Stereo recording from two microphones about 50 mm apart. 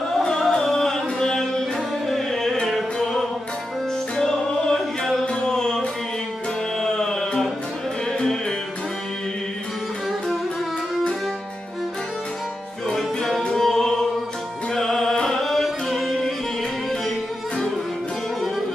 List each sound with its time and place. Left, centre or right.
0.2 s music: centre
4.2 s opera: centre
5.2 s music: left
12.9 s music: centre
15.1 s carnatic music: centre